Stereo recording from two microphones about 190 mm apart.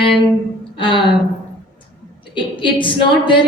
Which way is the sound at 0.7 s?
25° left (ahead or behind).